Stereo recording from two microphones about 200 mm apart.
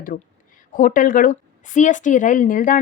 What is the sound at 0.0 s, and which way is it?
A woman's voice, 45° left (ahead or behind).